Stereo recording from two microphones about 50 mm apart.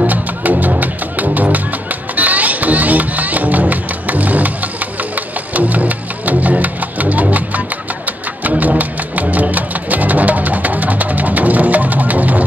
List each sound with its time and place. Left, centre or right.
0.0 s music: right